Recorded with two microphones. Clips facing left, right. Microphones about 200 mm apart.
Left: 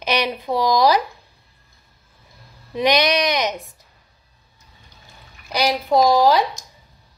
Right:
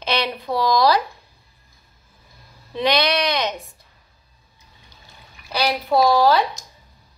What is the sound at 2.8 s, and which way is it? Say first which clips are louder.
Speech: left 2 dB; 15° left (ahead or behind).